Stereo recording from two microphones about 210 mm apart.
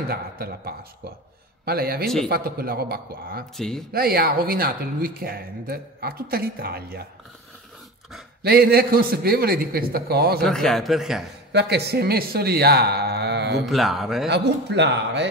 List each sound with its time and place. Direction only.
0.1 s speech: 50° right (ahead or behind)
3.5 s a man's voice: centre (ahead or behind)
3.9 s speech: 45° right (ahead or behind)
8.4 s speech: 50° right (ahead or behind)
10.4 s a man's voice: centre (ahead or behind)
11.5 s speech: 50° right (ahead or behind)
13.7 s a man's voice: centre (ahead or behind)
14.3 s a man's voice: 55° right (ahead or behind)